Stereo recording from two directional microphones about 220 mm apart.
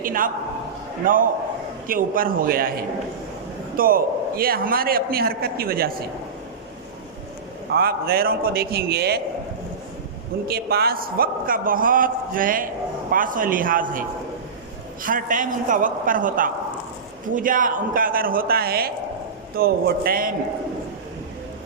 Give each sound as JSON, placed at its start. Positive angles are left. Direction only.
{"t": 0.0, "sound": "a man's voice", "side_deg": -40}
{"t": 7.7, "sound": "a man's voice", "side_deg": -45}
{"t": 10.5, "sound": "a man's voice", "side_deg": -45}
{"t": 15.0, "sound": "a man's voice", "side_deg": -40}